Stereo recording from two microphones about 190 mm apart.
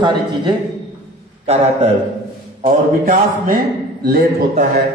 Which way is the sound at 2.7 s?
45° right (ahead or behind).